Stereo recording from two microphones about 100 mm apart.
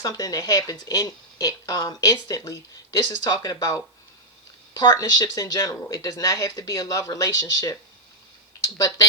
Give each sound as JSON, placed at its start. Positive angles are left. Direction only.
{"t": 0.0, "sound": "speech", "side_deg": 40}